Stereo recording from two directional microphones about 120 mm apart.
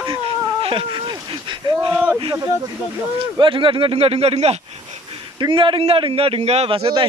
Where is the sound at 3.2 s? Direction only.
45° right (ahead or behind); by 4.6 s 60° right (ahead or behind).